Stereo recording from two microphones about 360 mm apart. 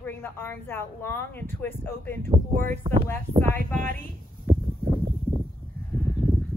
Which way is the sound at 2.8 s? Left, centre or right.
Centre.